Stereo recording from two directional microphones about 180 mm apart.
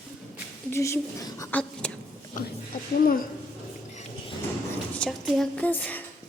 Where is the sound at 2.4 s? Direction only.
45° left (ahead or behind).